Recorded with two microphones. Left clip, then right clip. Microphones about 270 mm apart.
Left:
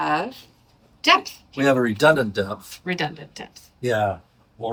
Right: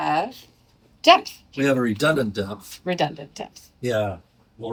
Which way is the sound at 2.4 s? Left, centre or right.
Left.